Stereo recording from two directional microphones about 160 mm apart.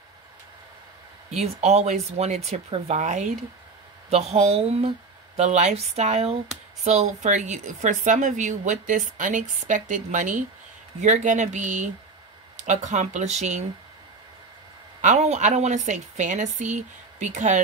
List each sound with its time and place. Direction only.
1.3 s a woman's voice: 40° right (ahead or behind)
15.0 s a woman's voice: 45° right (ahead or behind)